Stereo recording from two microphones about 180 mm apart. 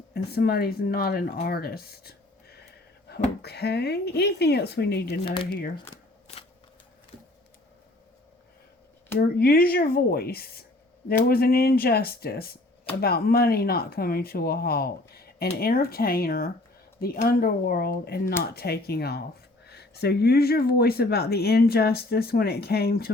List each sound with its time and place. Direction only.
0.1 s speech: 60° left (ahead or behind)
5.2 s speech: 30° left (ahead or behind)
5.5 s speech: 60° left (ahead or behind)
9.1 s speech: 55° left (ahead or behind)